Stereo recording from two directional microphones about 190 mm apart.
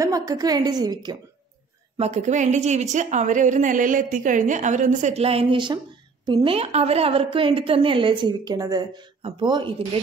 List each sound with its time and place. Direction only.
0.0 s a woman's voice: 20° right (ahead or behind)
2.0 s a woman's voice: 35° right (ahead or behind)